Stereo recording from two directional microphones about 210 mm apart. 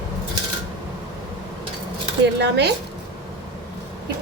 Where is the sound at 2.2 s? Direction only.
55° right (ahead or behind).